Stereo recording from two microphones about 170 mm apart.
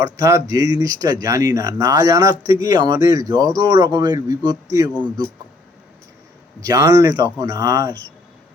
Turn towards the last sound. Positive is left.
turn(degrees=-20)  # may be behind; listen again after turning